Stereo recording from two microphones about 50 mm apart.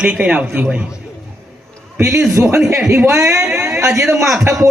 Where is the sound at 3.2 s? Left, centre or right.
Right.